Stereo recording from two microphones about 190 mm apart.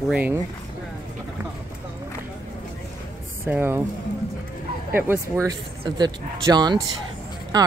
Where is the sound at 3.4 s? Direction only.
10° right (ahead or behind).